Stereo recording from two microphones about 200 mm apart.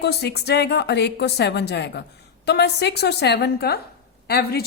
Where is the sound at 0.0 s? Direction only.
55° left (ahead or behind).